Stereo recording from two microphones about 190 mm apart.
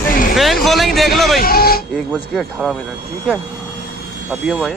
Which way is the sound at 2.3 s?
Centre (ahead or behind).